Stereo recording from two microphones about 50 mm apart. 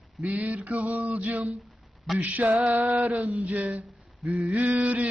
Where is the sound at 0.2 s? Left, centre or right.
Right.